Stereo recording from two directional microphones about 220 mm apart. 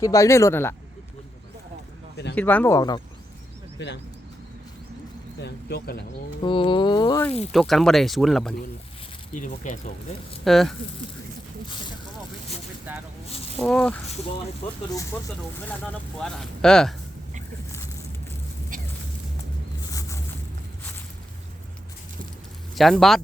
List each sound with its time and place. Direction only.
0.0 s speech: 15° left (ahead or behind)
2.3 s speech: 5° left (ahead or behind)
5.4 s speech: 50° left (ahead or behind)
6.4 s speech: 20° left (ahead or behind)
7.5 s speech: centre (ahead or behind)
9.3 s speech: 35° left (ahead or behind)
10.4 s speech: centre (ahead or behind)
12.9 s a sound: 5° right (ahead or behind)
13.6 s speech: 5° left (ahead or behind)
15.8 s speech: 5° left (ahead or behind)
18.7 s a sound: 40° right (ahead or behind)
19.9 s vehicle: 15° left (ahead or behind)
22.7 s speech: centre (ahead or behind)